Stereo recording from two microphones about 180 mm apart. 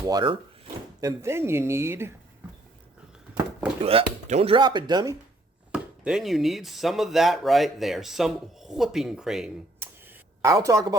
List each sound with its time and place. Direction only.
0.1 s speech: 25° right (ahead or behind)
3.8 s speech: 35° right (ahead or behind)
5.7 s speech: 5° right (ahead or behind)
9.8 s a sound: 10° right (ahead or behind)